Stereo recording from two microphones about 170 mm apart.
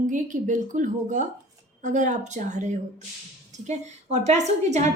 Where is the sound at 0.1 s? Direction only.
50° right (ahead or behind).